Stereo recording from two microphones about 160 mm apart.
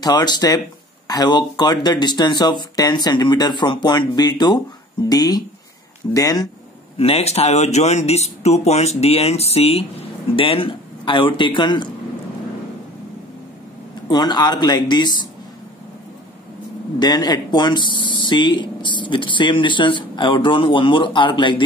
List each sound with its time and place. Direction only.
0.0 s speech: 25° left (ahead or behind)
7.0 s speech: 40° left (ahead or behind)
14.0 s speech: 25° left (ahead or behind)
17.0 s speech: 25° left (ahead or behind)